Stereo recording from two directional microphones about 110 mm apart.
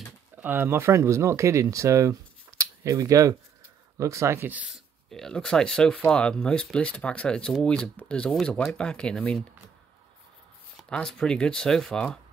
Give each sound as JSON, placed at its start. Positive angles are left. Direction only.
{"t": 0.4, "sound": "speech", "side_deg": -20}
{"t": 4.6, "sound": "speech", "side_deg": 0}
{"t": 10.8, "sound": "speech", "side_deg": 5}